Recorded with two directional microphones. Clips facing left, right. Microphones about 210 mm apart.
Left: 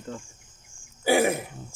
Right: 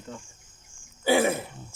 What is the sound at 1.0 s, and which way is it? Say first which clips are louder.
Throat clearing: left 1 dB; 15° left (ahead or behind).